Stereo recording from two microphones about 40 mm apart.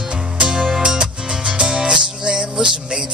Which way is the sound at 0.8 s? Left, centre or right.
Right.